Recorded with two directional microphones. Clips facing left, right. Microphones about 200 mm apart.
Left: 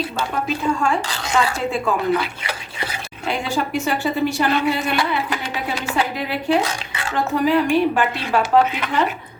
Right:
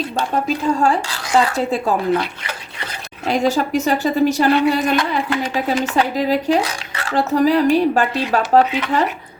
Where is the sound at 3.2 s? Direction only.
40° right (ahead or behind).